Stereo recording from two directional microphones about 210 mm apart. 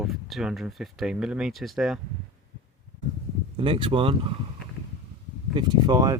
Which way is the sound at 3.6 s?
25° right (ahead or behind).